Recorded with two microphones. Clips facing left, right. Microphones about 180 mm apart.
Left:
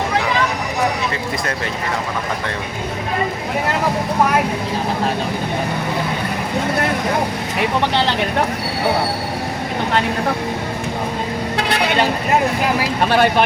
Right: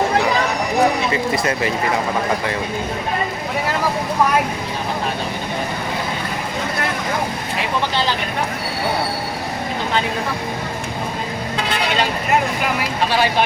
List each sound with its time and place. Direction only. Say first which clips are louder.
1.1 s speech: right 4 dB; 5° right (ahead or behind)
13.1 s speech: left 4 dB; 55° left (ahead or behind)